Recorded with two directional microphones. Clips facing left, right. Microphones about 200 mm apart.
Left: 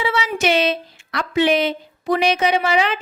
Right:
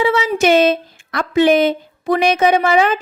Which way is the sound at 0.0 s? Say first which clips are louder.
Right 6 dB; 50° right (ahead or behind).